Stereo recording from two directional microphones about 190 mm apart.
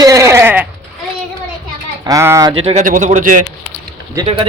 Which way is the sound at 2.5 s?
35° right (ahead or behind).